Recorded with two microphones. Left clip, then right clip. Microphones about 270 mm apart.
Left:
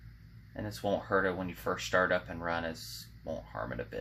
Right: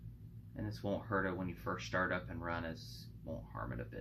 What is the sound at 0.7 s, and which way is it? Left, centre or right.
Speech, left.